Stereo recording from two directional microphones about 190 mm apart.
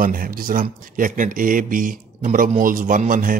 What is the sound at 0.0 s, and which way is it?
Speech, 50° right (ahead or behind).